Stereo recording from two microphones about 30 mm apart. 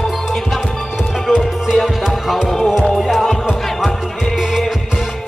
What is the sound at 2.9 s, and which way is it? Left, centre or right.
Music, centre.